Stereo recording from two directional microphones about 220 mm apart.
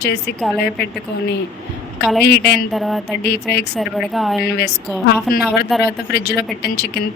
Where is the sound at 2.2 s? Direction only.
50° left (ahead or behind).